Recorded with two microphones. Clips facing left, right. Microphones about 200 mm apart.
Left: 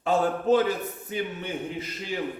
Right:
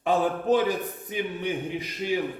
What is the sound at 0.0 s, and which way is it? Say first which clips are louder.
A man's voice: even; 15° right (ahead or behind).